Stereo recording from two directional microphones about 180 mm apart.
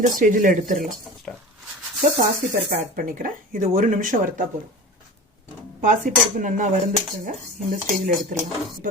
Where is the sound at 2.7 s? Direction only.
45° right (ahead or behind).